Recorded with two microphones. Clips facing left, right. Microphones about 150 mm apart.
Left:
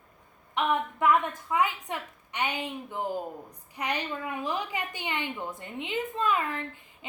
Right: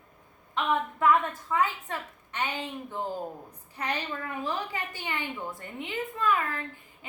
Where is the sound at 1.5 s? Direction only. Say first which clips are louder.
Left 1 dB; 15° left (ahead or behind).